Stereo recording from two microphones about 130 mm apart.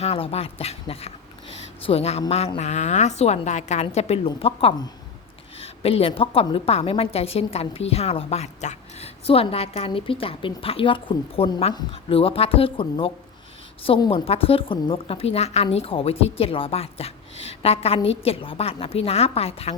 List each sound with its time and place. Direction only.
0.0 s a woman's voice: 50° left (ahead or behind)
2.6 s a woman's voice: 60° left (ahead or behind); by 13.1 s 45° left (ahead or behind)
14.1 s a woman's voice: 50° left (ahead or behind)